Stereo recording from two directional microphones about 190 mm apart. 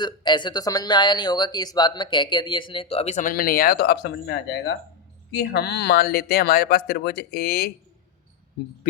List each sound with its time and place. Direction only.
0.0 s speech: 25° left (ahead or behind); by 7.7 s 55° left (ahead or behind)